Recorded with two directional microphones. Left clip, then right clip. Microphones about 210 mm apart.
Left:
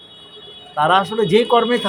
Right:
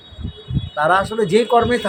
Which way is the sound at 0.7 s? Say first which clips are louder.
Left 1 dB; centre (ahead or behind).